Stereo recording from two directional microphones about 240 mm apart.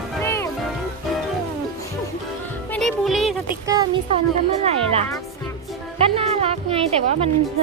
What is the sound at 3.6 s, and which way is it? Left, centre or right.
Speech, centre.